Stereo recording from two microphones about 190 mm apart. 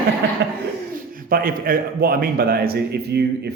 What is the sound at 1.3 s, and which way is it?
A man's voice, 50° right (ahead or behind).